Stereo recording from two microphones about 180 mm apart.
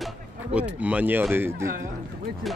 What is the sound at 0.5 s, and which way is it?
Speech, 5° right (ahead or behind).